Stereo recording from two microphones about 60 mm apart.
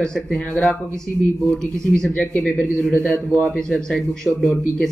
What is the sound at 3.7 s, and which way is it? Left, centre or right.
Speech, centre.